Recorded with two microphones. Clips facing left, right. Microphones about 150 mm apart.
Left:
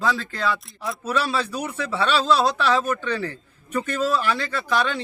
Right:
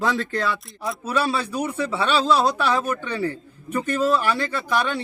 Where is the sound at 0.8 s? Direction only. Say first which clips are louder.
Right 1 dB; 10° right (ahead or behind).